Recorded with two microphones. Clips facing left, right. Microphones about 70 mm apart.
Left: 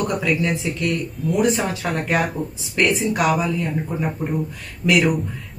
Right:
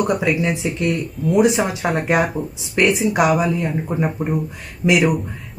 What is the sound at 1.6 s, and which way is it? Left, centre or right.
Speech, right.